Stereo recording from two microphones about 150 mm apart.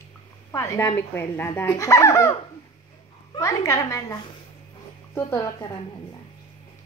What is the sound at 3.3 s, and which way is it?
Speech, 20° left (ahead or behind).